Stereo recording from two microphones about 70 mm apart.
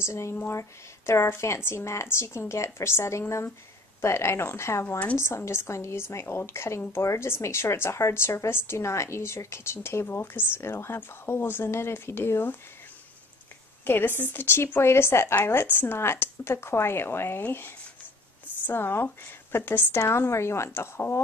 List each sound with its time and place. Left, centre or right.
0.0 s speech: left
4.8 s speech: left
5.1 s speech: left
13.8 s speech: left